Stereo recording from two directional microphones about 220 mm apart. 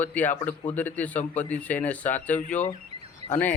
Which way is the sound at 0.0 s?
5° left (ahead or behind).